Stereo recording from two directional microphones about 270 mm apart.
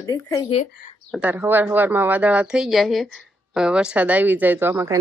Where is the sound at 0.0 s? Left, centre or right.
Centre.